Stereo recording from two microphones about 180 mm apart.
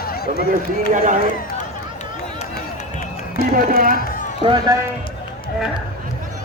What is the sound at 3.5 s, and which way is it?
Speech, 50° right (ahead or behind).